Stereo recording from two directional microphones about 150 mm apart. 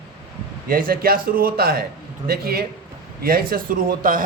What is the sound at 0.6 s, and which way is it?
Speech, 70° right (ahead or behind).